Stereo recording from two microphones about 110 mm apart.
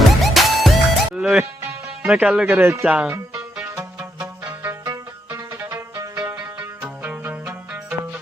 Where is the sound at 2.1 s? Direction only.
10° right (ahead or behind).